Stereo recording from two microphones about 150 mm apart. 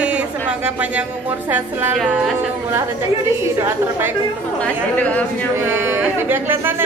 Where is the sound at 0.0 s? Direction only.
5° right (ahead or behind).